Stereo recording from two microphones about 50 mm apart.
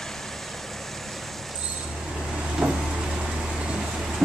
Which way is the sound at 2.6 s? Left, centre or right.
Right.